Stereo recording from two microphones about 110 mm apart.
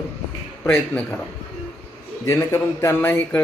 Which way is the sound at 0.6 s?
10° left (ahead or behind).